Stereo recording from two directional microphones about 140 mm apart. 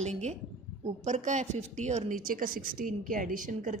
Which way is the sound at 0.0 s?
55° right (ahead or behind).